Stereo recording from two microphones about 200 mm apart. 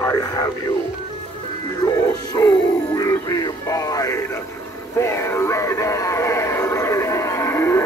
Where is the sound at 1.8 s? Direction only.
20° left (ahead or behind).